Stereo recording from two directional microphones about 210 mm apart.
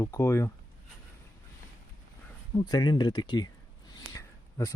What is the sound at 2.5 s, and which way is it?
Speech, 20° left (ahead or behind).